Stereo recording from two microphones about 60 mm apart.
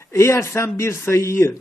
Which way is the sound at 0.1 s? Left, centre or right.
Left.